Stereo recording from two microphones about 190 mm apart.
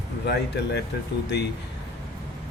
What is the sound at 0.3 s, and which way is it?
Speech, 65° left (ahead or behind).